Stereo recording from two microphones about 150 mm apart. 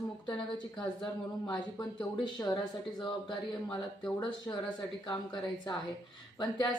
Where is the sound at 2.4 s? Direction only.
15° left (ahead or behind).